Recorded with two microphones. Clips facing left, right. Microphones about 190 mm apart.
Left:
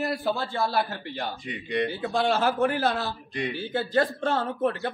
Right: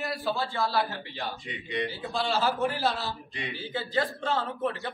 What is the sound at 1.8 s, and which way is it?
Speech, 55° left (ahead or behind).